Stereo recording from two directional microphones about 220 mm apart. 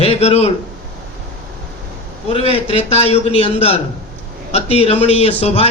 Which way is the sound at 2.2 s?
30° left (ahead or behind).